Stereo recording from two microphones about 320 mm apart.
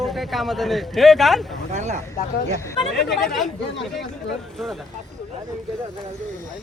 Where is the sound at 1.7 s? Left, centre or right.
Right.